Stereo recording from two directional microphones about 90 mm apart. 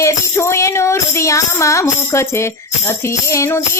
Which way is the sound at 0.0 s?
30° left (ahead or behind).